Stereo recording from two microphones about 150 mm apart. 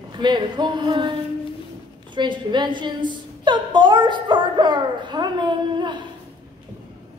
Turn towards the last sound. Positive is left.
turn(degrees=-30)  # may be behind; listen again after turning